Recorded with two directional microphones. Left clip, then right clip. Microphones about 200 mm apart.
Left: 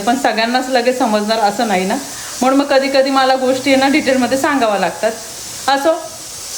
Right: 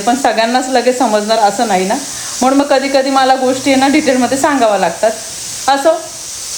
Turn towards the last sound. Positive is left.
turn(degrees=5)  # may be behind; listen again after turning